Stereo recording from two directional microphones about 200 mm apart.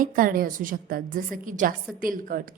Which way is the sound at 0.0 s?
45° right (ahead or behind).